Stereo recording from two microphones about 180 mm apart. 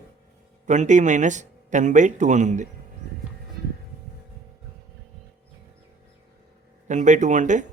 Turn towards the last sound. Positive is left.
turn(degrees=-45)  # may be behind; listen again after turning